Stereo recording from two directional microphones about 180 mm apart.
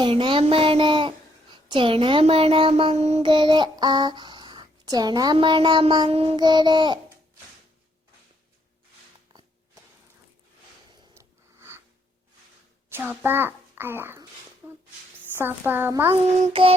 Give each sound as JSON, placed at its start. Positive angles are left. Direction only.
{"t": 0.0, "sound": "a child's voice", "side_deg": -25}
{"t": 11.1, "sound": "a sound", "side_deg": -15}
{"t": 12.9, "sound": "a child's voice", "side_deg": -10}
{"t": 14.6, "sound": "a sound", "side_deg": -10}
{"t": 15.4, "sound": "a child's voice", "side_deg": -10}
{"t": 16.4, "sound": "child singing", "side_deg": -30}